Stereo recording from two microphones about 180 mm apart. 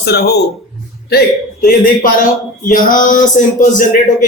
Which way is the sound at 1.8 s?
50° left (ahead or behind).